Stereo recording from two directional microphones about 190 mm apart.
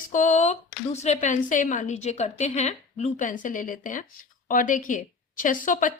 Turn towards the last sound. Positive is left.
turn(degrees=45)  # may be behind; listen again after turning